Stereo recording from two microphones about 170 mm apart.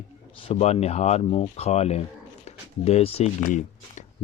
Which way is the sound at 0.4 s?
40° left (ahead or behind).